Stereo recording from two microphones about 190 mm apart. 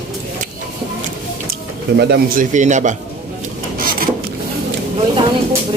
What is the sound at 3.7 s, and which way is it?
Printer, 50° right (ahead or behind).